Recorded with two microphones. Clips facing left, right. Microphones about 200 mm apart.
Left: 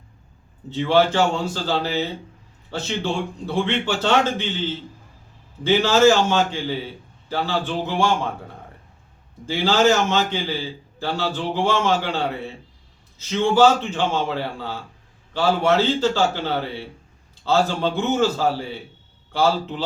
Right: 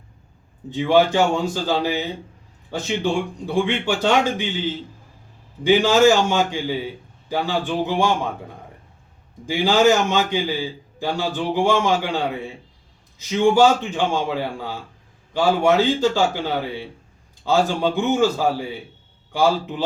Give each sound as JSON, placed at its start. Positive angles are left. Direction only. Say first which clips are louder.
{"t": 0.7, "sound": "a man's voice", "louder": "right 1 dB", "side_deg": -15}
{"t": 9.5, "sound": "a man's voice", "louder": "right 2 dB", "side_deg": -15}